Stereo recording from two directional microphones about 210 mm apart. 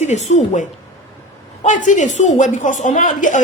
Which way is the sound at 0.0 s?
35° left (ahead or behind).